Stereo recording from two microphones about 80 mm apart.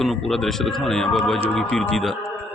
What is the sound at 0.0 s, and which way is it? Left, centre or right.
Speech, centre.